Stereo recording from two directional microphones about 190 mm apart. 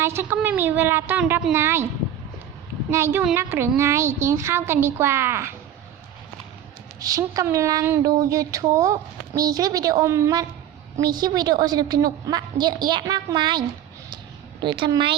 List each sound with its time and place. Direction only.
0.0 s speech: 10° right (ahead or behind)
2.9 s speech: 10° right (ahead or behind)
7.0 s a woman's voice: 20° right (ahead or behind)